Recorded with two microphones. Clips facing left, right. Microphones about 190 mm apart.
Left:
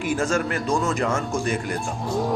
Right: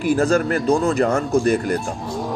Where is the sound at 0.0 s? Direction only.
35° right (ahead or behind).